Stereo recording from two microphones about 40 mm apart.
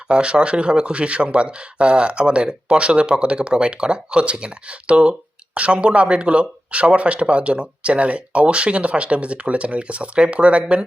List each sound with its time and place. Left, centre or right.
0.1 s speech: right